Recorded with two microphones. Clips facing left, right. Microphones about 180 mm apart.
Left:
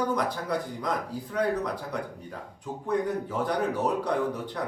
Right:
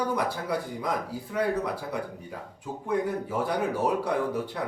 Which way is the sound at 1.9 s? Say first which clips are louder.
Right 1 dB; 10° right (ahead or behind).